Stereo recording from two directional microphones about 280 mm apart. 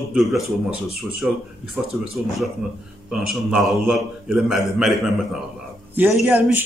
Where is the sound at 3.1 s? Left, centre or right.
Centre.